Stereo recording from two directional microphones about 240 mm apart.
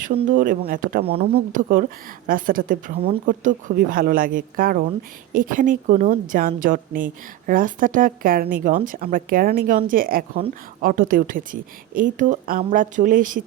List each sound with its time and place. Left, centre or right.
0.2 s a woman's voice: right